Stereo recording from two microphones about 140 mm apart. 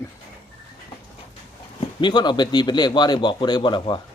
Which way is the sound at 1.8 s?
35° left (ahead or behind).